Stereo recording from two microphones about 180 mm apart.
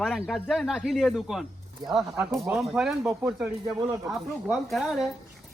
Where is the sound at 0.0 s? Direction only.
Centre (ahead or behind); by 3.8 s 15° right (ahead or behind).